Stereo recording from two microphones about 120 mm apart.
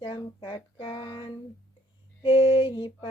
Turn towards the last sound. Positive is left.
turn(degrees=45)  # may be behind; listen again after turning